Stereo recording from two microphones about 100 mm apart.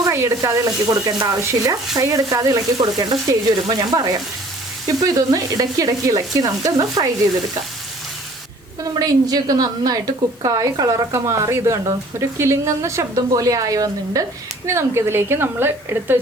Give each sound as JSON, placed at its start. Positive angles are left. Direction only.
{"t": 0.0, "sound": "sizzle", "side_deg": -25}
{"t": 1.4, "sound": "a woman's voice", "side_deg": -30}
{"t": 9.0, "sound": "a woman's voice", "side_deg": -40}